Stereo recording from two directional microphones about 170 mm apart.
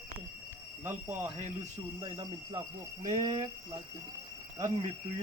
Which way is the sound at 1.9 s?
30° right (ahead or behind).